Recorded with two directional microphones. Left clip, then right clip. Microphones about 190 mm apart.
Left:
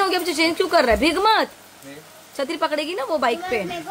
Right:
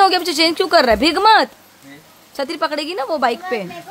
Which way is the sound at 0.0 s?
25° right (ahead or behind).